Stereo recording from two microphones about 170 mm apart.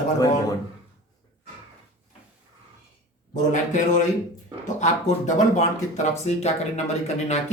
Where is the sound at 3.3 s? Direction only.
45° left (ahead or behind).